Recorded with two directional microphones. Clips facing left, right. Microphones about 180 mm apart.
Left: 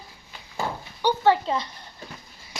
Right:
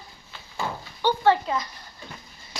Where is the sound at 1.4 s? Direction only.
30° left (ahead or behind).